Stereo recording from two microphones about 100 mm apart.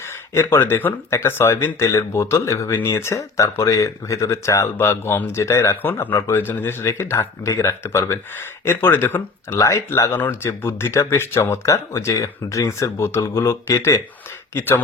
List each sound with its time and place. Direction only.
0.3 s speech: 25° left (ahead or behind)